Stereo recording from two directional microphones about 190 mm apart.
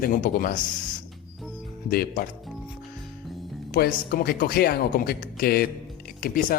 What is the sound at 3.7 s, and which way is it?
Speech, 50° left (ahead or behind).